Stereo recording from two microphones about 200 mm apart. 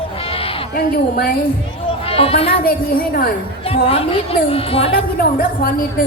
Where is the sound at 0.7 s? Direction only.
50° left (ahead or behind).